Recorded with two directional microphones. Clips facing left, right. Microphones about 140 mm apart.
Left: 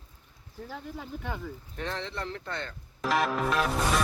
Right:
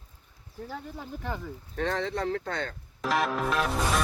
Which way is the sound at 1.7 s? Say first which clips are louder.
Right 7 dB; 60° right (ahead or behind).